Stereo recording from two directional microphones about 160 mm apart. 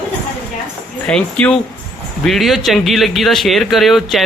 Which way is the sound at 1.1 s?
5° left (ahead or behind).